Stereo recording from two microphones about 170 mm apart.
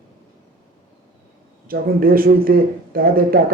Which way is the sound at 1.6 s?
60° right (ahead or behind).